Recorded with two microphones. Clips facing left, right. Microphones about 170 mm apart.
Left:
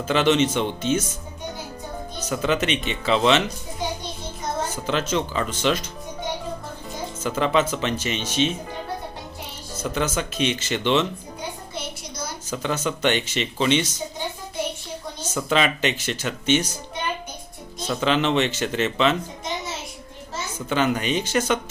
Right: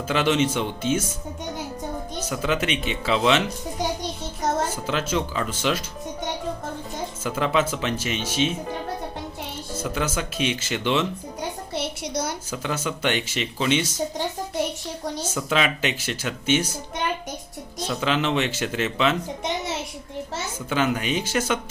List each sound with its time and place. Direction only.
0.1 s speech: 5° right (ahead or behind)
2.2 s speech: 5° right (ahead or behind)
4.7 s speech: 5° right (ahead or behind)
7.3 s speech: 5° right (ahead or behind)
9.8 s speech: 5° right (ahead or behind)
11.7 s a sound: 75° right (ahead or behind)
12.5 s speech: 10° right (ahead or behind)
15.4 s speech: 5° right (ahead or behind)
17.8 s speech: 5° right (ahead or behind)
20.7 s speech: 5° right (ahead or behind)